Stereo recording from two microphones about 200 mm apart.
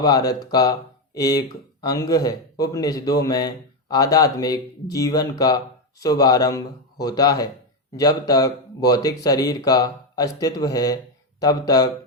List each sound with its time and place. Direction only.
0.0 s speech: 20° left (ahead or behind)